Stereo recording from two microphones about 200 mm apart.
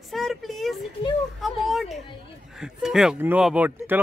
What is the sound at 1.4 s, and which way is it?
Speech, centre (ahead or behind).